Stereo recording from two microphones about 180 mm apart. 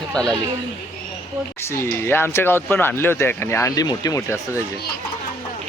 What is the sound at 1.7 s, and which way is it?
Speech, 15° left (ahead or behind).